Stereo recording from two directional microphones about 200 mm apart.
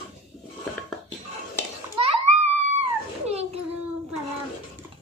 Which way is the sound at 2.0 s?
35° right (ahead or behind).